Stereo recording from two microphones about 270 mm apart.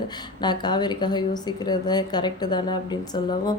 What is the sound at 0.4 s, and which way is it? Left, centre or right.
A woman's voice, centre.